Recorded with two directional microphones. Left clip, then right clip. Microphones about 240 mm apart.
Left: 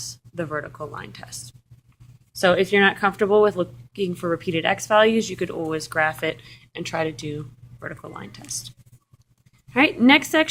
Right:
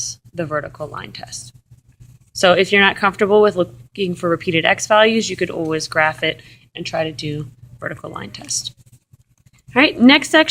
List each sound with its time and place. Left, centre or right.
0.0 s speech: centre
7.3 s speech: centre
9.7 s speech: centre